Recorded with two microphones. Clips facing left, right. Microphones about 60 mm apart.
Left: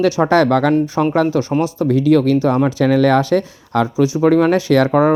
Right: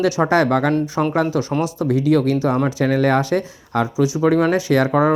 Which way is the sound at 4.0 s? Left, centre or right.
Left.